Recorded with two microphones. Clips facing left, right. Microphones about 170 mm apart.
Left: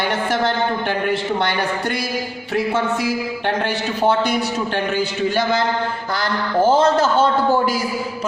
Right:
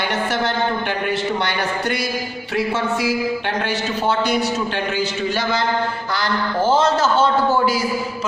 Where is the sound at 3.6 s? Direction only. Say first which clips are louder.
Left 3 dB; 50° left (ahead or behind).